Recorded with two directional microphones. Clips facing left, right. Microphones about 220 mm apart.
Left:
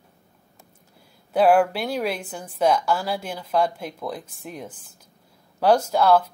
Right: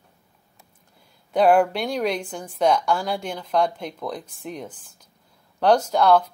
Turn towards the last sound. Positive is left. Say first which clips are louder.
# even
turn(degrees=5)  # may be behind; listen again after turning